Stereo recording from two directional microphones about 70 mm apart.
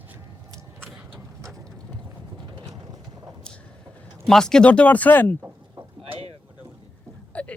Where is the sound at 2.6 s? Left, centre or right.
Right.